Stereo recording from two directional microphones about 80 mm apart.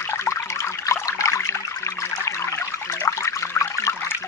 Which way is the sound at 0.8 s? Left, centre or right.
Left.